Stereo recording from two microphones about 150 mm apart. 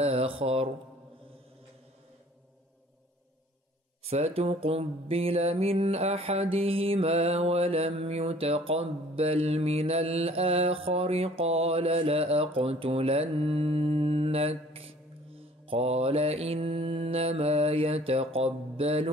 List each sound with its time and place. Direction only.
0.0 s speech: 40° right (ahead or behind)
4.0 s mantra: 45° right (ahead or behind)